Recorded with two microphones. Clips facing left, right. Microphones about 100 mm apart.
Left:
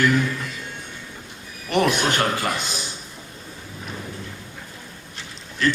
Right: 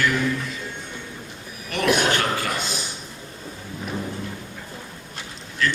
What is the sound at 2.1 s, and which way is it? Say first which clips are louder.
Speech: left 1 dB; 20° left (ahead or behind).